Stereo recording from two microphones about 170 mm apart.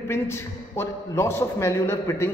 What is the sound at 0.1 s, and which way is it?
A man's voice, 15° left (ahead or behind).